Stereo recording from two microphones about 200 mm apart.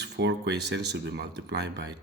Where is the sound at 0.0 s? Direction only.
60° right (ahead or behind).